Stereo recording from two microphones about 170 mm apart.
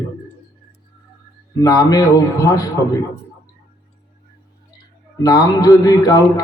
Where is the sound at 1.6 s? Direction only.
20° left (ahead or behind).